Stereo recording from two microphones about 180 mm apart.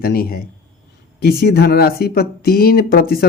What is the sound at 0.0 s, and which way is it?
Speech, 55° left (ahead or behind).